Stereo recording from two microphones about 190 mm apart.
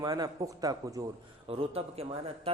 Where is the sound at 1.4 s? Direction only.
30° right (ahead or behind).